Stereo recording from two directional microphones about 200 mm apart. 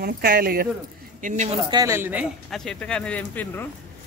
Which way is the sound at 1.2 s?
35° right (ahead or behind).